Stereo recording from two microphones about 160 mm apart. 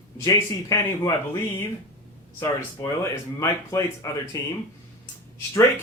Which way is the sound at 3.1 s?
20° left (ahead or behind).